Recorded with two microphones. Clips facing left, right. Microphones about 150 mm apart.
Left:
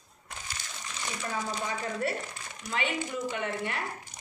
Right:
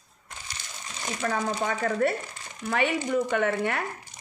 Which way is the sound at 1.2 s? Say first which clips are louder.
Right 7 dB; 55° right (ahead or behind).